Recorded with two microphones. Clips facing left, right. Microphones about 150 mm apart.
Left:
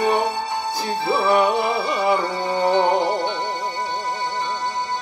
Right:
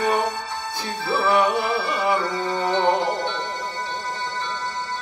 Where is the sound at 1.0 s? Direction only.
15° left (ahead or behind).